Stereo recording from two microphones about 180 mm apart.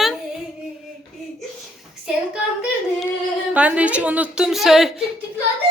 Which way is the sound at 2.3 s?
5° right (ahead or behind).